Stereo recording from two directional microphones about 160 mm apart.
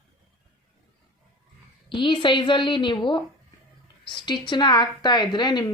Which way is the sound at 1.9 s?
30° left (ahead or behind).